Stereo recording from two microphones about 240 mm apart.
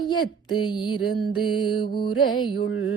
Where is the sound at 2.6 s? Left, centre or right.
Left.